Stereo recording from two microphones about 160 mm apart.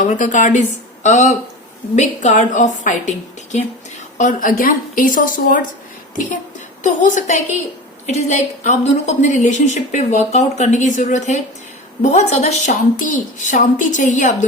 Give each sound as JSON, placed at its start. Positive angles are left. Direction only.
{"t": 0.0, "sound": "a woman's voice", "side_deg": 50}